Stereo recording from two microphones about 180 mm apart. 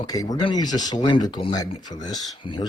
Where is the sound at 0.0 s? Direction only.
20° left (ahead or behind).